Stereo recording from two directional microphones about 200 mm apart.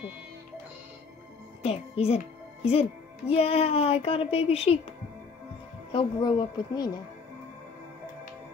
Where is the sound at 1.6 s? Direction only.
30° left (ahead or behind).